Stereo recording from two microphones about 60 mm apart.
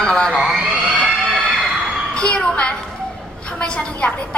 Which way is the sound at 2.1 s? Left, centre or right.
Centre.